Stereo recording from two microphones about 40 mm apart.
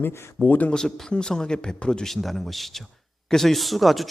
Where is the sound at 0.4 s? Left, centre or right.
Left.